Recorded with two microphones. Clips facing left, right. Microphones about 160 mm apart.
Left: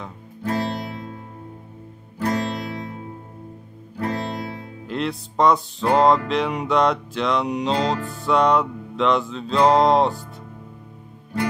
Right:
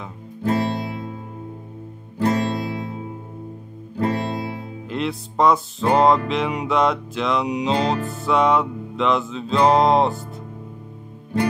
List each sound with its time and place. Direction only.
0.5 s music: 25° right (ahead or behind)
2.1 s music: 25° right (ahead or behind)
4.0 s music: 25° right (ahead or behind)
4.8 s music: centre (ahead or behind)